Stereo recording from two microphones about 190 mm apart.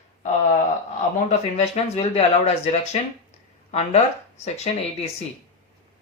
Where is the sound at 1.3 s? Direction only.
35° left (ahead or behind).